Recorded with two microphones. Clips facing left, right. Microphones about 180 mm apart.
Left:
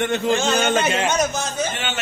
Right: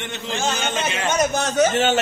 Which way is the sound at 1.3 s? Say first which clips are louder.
Right 6 dB; 70° right (ahead or behind).